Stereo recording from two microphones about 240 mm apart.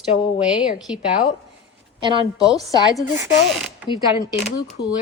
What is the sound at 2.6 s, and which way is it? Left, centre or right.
Speech, centre.